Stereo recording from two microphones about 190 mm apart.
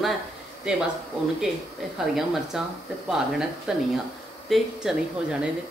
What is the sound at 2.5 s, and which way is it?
Speech, centre (ahead or behind).